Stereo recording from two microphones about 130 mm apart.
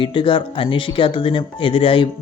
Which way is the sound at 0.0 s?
40° left (ahead or behind).